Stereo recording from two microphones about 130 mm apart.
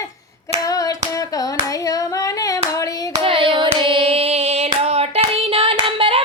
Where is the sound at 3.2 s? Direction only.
45° right (ahead or behind).